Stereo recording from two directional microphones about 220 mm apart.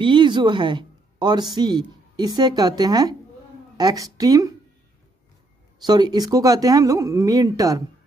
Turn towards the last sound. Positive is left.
turn(degrees=-15)  # may be behind; listen again after turning